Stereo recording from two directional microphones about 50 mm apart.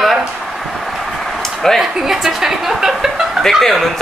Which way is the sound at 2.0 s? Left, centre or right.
Centre.